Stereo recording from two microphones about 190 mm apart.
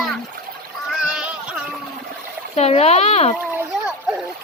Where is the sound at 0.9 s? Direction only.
5° right (ahead or behind).